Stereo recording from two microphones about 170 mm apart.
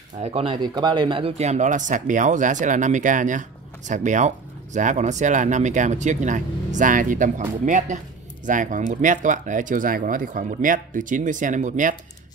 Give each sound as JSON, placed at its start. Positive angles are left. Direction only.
{"t": 0.2, "sound": "speech", "side_deg": -35}